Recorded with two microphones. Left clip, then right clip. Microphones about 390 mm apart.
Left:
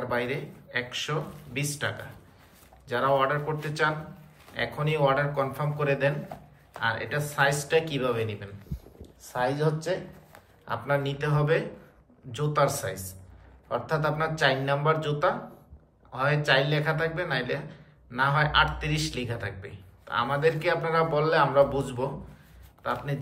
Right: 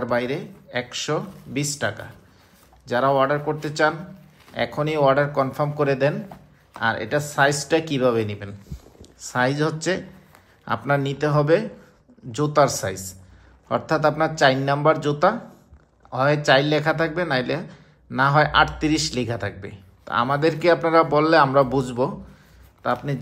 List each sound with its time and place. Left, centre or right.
0.1 s a man's voice: centre
8.7 s a sound: centre
9.0 s a man's voice: centre